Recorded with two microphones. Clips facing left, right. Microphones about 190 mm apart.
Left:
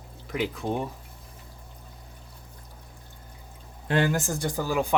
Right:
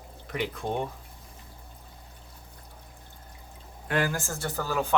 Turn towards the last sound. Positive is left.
turn(degrees=15)  # may be behind; listen again after turning